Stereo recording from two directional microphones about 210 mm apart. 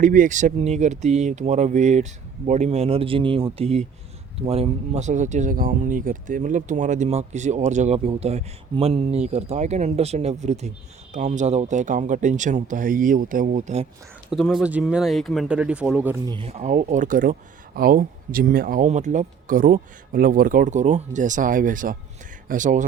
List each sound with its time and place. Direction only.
0.0 s speech: 35° right (ahead or behind)
14.3 s speech: centre (ahead or behind)
16.2 s speech: 25° right (ahead or behind)